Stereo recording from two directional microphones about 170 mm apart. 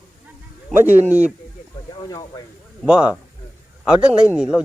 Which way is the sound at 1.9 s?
25° left (ahead or behind).